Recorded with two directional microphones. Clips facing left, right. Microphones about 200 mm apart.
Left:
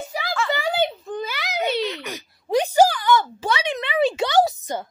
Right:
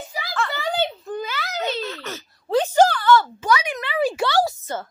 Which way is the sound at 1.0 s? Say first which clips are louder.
Even; centre (ahead or behind).